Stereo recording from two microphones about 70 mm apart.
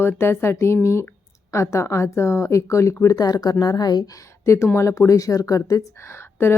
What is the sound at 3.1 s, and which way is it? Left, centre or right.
A woman's voice, left.